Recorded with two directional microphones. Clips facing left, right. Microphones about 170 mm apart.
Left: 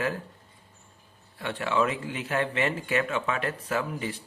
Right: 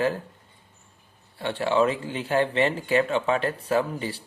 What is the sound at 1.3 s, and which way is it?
A man's voice, 30° right (ahead or behind).